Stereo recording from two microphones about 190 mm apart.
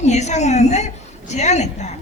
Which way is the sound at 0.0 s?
35° left (ahead or behind).